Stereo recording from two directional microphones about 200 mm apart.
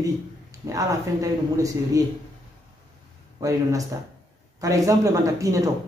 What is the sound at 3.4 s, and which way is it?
Speech, 15° right (ahead or behind).